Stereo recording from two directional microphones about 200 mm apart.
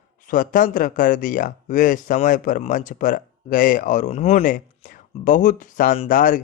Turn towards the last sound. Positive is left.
turn(degrees=40)  # may be behind; listen again after turning